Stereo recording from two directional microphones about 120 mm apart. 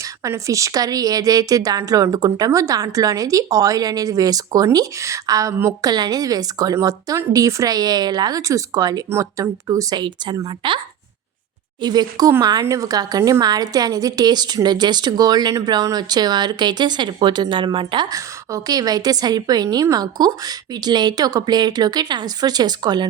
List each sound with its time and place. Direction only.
0.2 s a woman's voice: 25° right (ahead or behind)
10.6 s a woman's voice: 40° right (ahead or behind)